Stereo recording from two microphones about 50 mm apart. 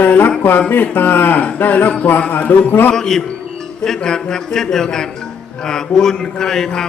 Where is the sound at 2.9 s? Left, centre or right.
Centre.